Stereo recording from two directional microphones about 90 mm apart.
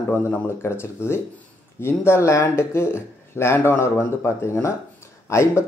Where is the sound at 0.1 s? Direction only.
25° left (ahead or behind).